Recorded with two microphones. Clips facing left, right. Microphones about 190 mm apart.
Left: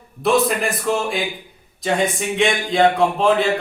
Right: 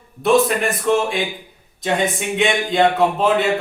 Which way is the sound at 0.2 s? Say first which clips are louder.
Right 2 dB; centre (ahead or behind).